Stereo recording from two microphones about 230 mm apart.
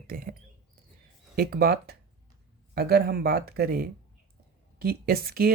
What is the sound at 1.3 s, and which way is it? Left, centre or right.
Speech, right.